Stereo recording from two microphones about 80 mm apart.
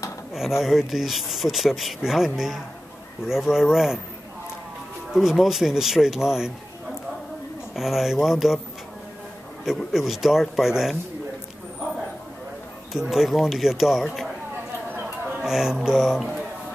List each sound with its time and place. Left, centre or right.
0.6 s speech: centre
5.1 s speech: centre
7.7 s speech: centre
9.9 s speech: centre
12.9 s speech: centre
15.0 s a sound: right
15.4 s speech: centre